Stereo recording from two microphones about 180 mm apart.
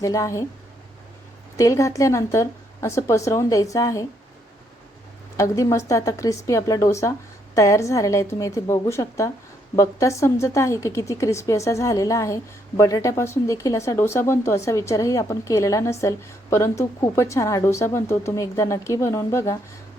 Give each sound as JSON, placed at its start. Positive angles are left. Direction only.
{"t": 0.0, "sound": "a woman's voice", "side_deg": 20}
{"t": 1.5, "sound": "a woman's voice", "side_deg": 15}
{"t": 5.4, "sound": "a woman's voice", "side_deg": 15}